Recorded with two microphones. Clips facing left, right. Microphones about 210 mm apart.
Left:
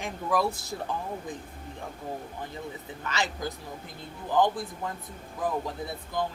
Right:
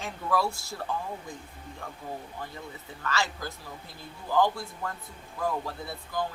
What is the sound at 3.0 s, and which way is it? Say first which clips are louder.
A man's voice: even; 20° left (ahead or behind).